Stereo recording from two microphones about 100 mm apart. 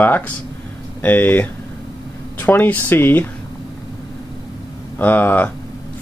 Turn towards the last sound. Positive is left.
turn(degrees=20)  # may be behind; listen again after turning